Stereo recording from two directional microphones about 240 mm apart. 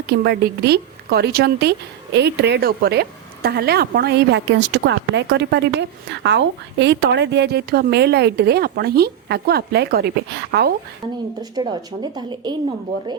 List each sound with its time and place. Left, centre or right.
0.1 s a woman's voice: right
11.5 s speech: centre